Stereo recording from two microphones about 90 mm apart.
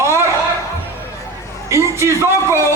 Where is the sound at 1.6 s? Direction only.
30° right (ahead or behind).